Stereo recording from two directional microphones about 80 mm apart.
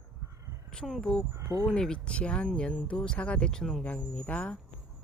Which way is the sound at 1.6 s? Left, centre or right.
Centre.